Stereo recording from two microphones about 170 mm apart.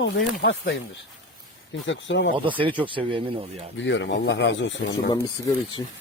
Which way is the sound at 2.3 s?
30° right (ahead or behind).